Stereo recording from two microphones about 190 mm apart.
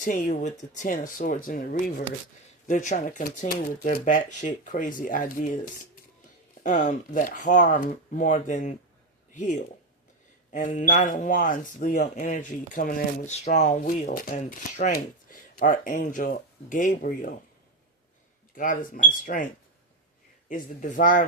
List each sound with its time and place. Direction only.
0.0 s speech: 45° left (ahead or behind)
6.6 s speech: 40° left (ahead or behind)
18.5 s speech: 45° left (ahead or behind)
20.5 s speech: 45° left (ahead or behind)